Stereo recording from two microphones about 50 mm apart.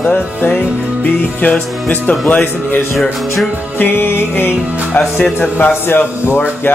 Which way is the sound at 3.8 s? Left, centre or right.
Left.